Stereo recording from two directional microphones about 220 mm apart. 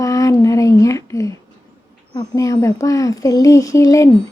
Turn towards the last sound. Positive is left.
turn(degrees=15)  # may be behind; listen again after turning